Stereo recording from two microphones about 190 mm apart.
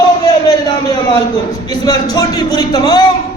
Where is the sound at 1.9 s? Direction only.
20° left (ahead or behind).